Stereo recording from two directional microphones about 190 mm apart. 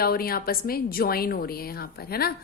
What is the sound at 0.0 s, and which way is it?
A woman's voice, 50° left (ahead or behind).